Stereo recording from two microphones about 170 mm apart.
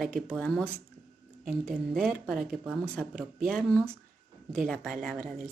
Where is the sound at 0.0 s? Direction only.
Centre (ahead or behind).